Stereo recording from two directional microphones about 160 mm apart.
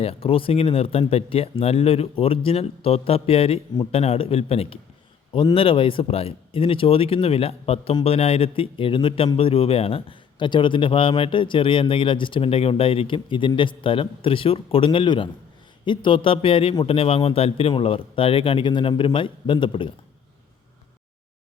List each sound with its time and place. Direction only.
0.0 s speech: 35° left (ahead or behind)